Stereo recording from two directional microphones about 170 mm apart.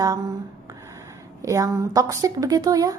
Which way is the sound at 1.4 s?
20° right (ahead or behind).